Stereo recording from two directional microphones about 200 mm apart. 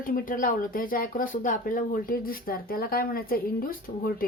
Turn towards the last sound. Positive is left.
turn(degrees=45)  # may be behind; listen again after turning